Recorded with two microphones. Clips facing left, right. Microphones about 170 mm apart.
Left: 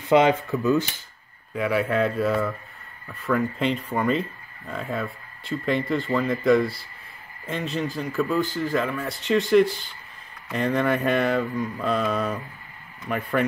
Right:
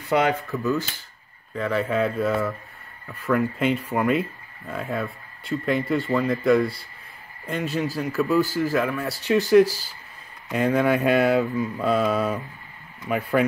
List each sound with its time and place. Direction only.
0.1 s speech: 20° left (ahead or behind)
1.5 s speech: 10° left (ahead or behind)
2.0 s speech: centre (ahead or behind)